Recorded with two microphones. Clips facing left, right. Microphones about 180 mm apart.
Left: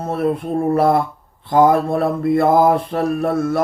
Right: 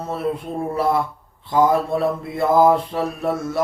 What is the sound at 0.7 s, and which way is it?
Mantra, 55° left (ahead or behind).